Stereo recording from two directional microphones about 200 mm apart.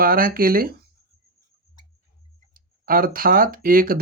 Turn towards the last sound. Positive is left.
turn(degrees=-45)  # may be behind; listen again after turning